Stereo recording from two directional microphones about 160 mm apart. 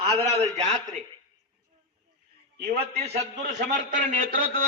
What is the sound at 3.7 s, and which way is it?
Speech, 60° right (ahead or behind).